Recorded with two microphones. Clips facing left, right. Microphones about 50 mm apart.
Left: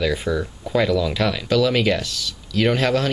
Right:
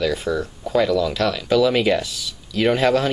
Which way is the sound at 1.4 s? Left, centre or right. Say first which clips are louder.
Right 2 dB; centre.